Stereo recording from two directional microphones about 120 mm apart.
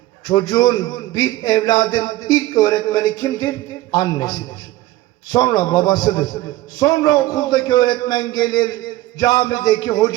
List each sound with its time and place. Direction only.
0.3 s a man's voice: 35° left (ahead or behind)